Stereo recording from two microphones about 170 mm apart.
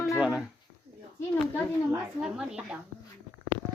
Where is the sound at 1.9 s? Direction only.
5° right (ahead or behind).